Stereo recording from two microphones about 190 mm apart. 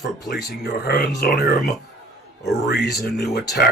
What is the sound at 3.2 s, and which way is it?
Speech, 60° left (ahead or behind).